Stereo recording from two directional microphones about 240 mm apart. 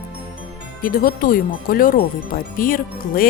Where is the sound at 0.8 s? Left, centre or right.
Left.